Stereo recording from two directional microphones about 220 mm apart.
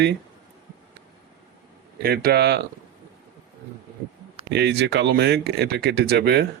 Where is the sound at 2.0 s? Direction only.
45° right (ahead or behind).